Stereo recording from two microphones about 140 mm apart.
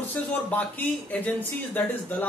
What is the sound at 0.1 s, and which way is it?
Speech, 10° left (ahead or behind).